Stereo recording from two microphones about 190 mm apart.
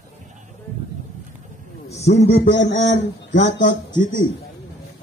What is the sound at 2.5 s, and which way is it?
Speech, 70° left (ahead or behind).